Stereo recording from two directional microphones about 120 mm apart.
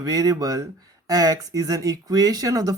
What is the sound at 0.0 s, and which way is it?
Speech, 30° right (ahead or behind).